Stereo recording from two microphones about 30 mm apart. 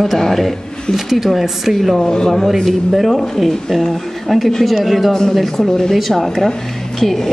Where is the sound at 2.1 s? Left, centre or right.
Centre.